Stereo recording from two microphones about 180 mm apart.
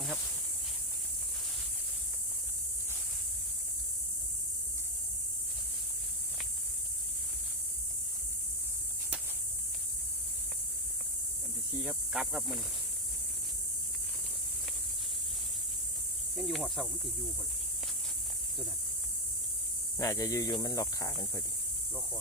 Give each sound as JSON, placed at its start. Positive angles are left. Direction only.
{"t": 11.8, "sound": "speech", "side_deg": -5}
{"t": 16.3, "sound": "speech", "side_deg": 0}
{"t": 20.0, "sound": "speech", "side_deg": 20}